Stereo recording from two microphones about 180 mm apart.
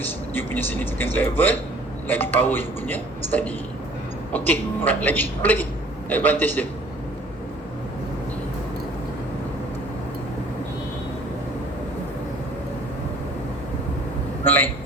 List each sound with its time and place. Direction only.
0.3 s a man's voice: 10° left (ahead or behind)
14.4 s vehicle: 10° left (ahead or behind)